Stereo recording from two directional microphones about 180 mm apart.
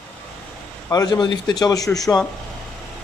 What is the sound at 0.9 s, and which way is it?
Speech, 20° left (ahead or behind).